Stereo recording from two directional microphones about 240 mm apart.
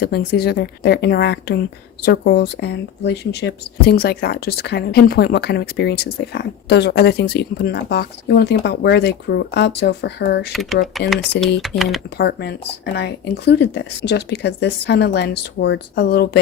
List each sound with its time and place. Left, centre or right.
0.0 s a woman's voice: left
10.5 s speech: centre
11.3 s a woman's voice: left